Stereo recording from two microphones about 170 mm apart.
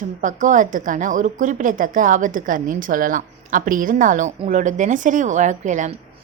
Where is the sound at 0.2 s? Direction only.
50° right (ahead or behind).